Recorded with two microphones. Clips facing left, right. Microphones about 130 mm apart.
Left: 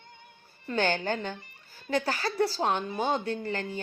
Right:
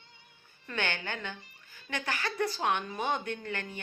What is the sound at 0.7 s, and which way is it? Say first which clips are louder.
Speech: left 7 dB; 40° left (ahead or behind).